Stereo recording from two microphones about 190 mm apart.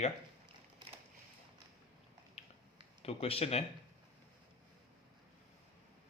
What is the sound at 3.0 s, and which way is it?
Speech, 30° left (ahead or behind).